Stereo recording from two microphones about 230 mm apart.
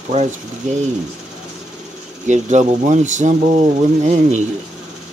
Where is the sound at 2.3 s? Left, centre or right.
Right.